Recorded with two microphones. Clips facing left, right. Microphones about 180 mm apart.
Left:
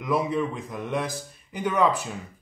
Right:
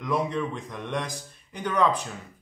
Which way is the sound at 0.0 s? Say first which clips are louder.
Left 2 dB; 5° left (ahead or behind).